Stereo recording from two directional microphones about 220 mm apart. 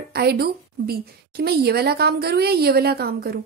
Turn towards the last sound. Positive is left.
turn(degrees=-45)  # may be behind; listen again after turning